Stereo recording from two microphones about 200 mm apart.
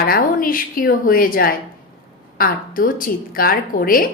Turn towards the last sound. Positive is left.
turn(degrees=45)  # may be behind; listen again after turning